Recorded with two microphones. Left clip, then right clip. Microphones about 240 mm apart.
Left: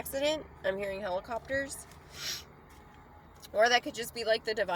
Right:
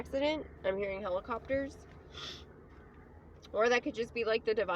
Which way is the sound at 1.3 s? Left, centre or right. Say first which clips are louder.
Left 1 dB; centre.